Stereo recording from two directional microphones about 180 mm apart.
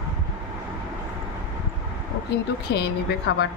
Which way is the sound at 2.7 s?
65° left (ahead or behind).